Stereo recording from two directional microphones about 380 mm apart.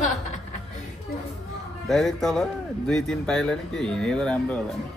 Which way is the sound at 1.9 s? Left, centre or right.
Centre.